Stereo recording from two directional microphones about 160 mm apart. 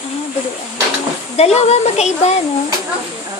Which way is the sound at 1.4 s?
40° left (ahead or behind).